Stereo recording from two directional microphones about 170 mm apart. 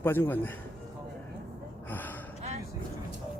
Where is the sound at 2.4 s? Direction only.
40° right (ahead or behind).